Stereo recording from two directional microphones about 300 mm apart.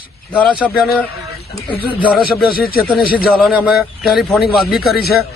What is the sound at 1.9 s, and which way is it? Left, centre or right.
Speech, centre.